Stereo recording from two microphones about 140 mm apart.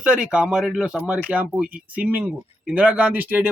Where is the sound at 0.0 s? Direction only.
5° right (ahead or behind).